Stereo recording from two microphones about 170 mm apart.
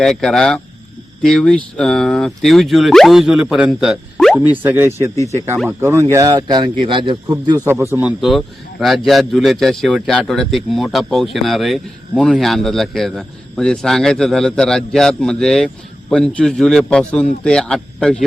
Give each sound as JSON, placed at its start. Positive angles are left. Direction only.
{"t": 0.0, "sound": "speech", "side_deg": 5}
{"t": 3.8, "sound": "a sound", "side_deg": 0}
{"t": 4.4, "sound": "a man's voice", "side_deg": -10}
{"t": 8.2, "sound": "speech", "side_deg": 0}